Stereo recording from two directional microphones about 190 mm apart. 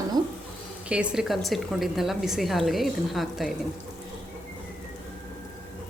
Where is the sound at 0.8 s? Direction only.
5° right (ahead or behind).